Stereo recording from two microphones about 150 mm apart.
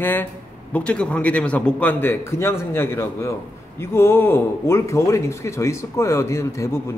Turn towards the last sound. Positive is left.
turn(degrees=20)  # may be behind; listen again after turning